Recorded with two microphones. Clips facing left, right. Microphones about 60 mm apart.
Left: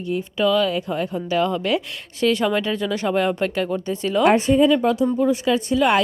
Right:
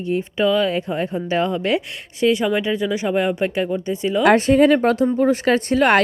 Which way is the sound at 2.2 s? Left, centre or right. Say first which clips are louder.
Right 2 dB; centre.